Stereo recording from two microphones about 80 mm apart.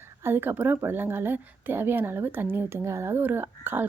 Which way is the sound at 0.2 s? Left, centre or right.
Right.